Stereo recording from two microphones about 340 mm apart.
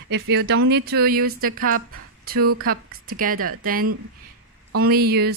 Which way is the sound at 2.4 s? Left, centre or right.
Right.